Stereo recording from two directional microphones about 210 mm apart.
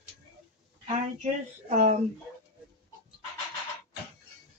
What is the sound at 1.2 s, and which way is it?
Speech, 35° right (ahead or behind).